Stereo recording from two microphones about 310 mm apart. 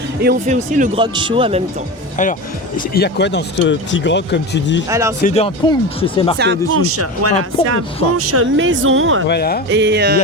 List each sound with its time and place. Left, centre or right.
0.2 s speech: right
2.9 s speech: left
4.9 s speech: centre
5.2 s speech: centre
6.3 s speech: right
9.2 s speech: left
9.6 s speech: right